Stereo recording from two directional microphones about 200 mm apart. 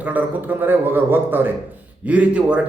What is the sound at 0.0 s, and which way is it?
A man's voice, 10° right (ahead or behind).